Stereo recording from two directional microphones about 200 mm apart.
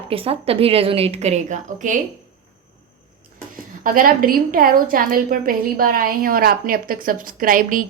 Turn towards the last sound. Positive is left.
turn(degrees=-45)  # may be behind; listen again after turning